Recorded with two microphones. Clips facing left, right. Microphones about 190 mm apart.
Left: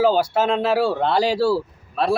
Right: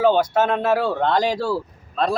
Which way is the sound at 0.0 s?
10° left (ahead or behind).